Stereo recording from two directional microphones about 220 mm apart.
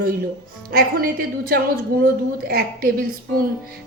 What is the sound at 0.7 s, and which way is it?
A woman's voice, 40° right (ahead or behind).